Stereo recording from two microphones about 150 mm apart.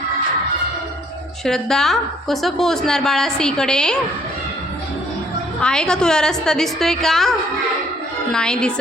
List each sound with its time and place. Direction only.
1.5 s a woman's voice: 5° left (ahead or behind)
5.6 s a woman's voice: 5° left (ahead or behind)